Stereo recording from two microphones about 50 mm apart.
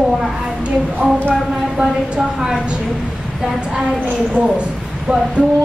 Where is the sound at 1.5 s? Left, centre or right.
Centre.